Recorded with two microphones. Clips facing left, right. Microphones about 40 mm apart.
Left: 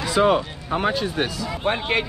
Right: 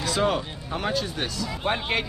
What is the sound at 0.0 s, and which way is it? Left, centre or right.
Speech, centre.